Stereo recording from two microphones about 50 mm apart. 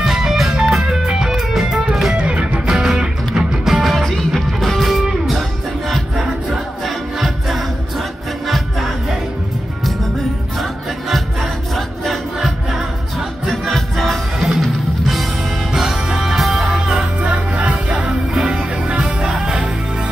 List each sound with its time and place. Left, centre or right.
0.0 s music: centre
2.1 s music: right
2.7 s music: centre
5.0 s music: centre
7.2 s music: centre
10.6 s music: centre
12.4 s music: centre
13.5 s music: centre
15.7 s music: centre
16.7 s music: centre
18.0 s music: centre